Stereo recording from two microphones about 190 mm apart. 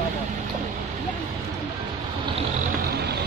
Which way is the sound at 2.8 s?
55° right (ahead or behind).